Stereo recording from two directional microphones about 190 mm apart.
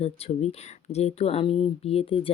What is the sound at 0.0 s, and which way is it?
Speech, 35° left (ahead or behind).